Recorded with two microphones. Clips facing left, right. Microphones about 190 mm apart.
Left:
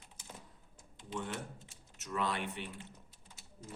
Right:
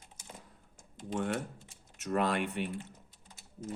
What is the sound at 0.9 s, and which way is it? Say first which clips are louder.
Speech: right 7 dB; 50° right (ahead or behind).